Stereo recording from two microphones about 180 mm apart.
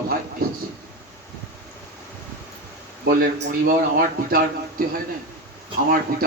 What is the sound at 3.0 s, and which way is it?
Speech, 55° right (ahead or behind).